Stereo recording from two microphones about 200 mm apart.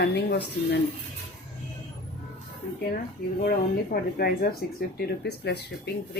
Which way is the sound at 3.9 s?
50° left (ahead or behind).